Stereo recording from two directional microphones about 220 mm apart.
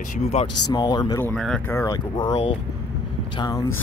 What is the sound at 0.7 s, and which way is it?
Speech, 20° left (ahead or behind).